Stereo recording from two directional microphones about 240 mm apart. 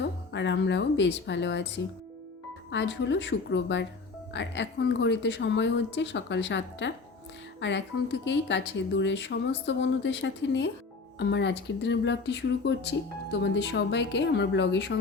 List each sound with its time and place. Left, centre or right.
0.0 s speech: left